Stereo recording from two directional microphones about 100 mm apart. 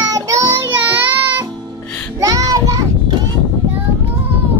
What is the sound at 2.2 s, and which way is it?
Child singing, 35° right (ahead or behind).